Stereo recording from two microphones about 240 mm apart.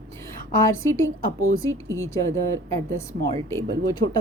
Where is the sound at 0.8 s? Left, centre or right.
Centre.